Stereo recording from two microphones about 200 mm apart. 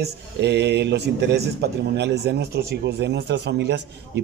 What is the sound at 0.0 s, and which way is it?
A man's voice, 60° right (ahead or behind).